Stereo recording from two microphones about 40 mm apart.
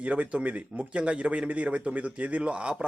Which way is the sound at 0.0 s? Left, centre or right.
Right.